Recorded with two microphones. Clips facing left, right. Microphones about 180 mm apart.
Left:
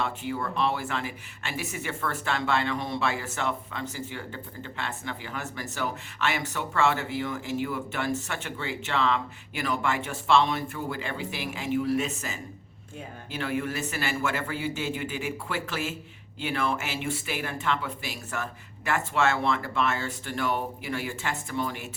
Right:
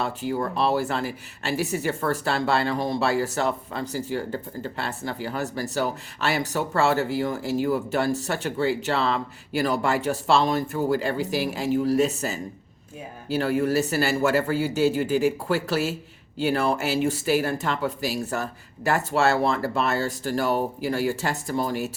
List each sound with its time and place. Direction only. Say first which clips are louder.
0.0 s speech: right 4 dB; 40° right (ahead or behind)